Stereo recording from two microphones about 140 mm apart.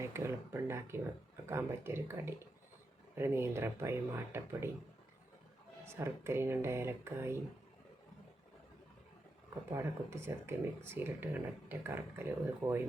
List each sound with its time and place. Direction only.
0.0 s speech: 20° right (ahead or behind)
5.8 s speech: 20° right (ahead or behind)
9.6 s speech: 20° right (ahead or behind)